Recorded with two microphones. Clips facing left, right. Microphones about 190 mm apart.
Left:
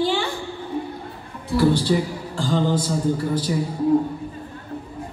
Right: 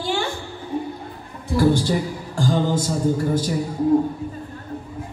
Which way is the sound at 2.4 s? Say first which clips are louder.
Right 1 dB; 50° right (ahead or behind).